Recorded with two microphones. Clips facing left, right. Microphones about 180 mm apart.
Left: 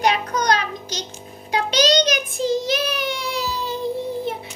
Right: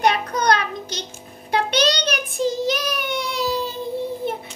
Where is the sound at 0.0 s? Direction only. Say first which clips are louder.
Right 1 dB; 55° right (ahead or behind).